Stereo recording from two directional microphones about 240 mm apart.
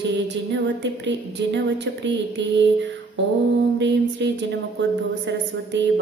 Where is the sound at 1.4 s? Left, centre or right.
Right.